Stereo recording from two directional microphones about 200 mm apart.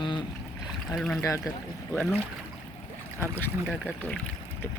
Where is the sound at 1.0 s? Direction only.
5° left (ahead or behind).